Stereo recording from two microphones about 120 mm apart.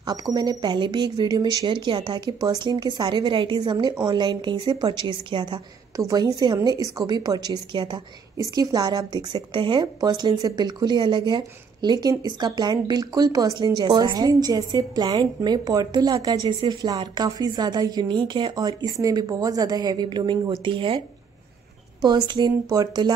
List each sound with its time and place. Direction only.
0.0 s speech: 35° right (ahead or behind)
5.9 s a woman's voice: 30° right (ahead or behind); by 21.0 s 45° right (ahead or behind)
22.0 s speech: 40° right (ahead or behind)